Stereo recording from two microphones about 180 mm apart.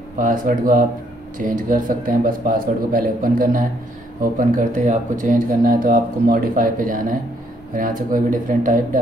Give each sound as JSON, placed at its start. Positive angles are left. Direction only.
{"t": 0.2, "sound": "speech", "side_deg": -50}